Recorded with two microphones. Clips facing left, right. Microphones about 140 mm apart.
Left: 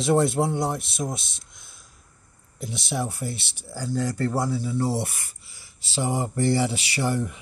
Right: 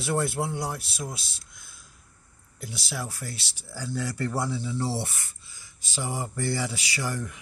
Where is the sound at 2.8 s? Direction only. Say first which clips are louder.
Left 7 dB; 20° left (ahead or behind).